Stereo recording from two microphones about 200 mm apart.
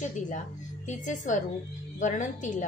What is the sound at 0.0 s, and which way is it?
Speech, 40° left (ahead or behind).